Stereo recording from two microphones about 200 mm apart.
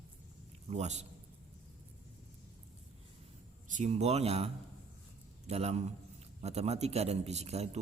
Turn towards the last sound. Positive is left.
turn(degrees=-30)  # may be behind; listen again after turning